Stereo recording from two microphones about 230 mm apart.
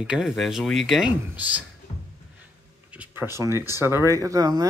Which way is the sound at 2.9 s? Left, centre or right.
Centre.